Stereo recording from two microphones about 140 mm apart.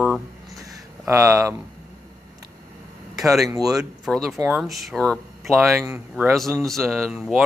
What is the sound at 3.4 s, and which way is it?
Speech, 25° right (ahead or behind).